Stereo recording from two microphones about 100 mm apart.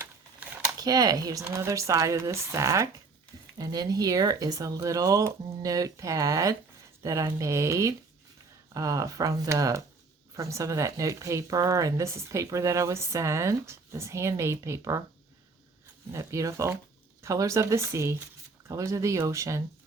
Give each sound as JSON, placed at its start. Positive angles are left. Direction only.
{"t": 0.8, "sound": "speech", "side_deg": -40}
{"t": 16.1, "sound": "speech", "side_deg": -30}